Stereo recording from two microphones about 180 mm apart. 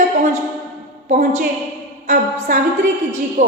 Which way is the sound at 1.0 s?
40° right (ahead or behind).